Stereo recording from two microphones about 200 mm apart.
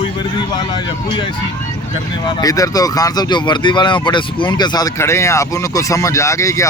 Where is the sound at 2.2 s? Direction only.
20° left (ahead or behind).